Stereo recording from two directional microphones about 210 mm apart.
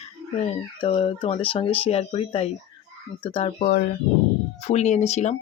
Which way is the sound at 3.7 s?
40° left (ahead or behind).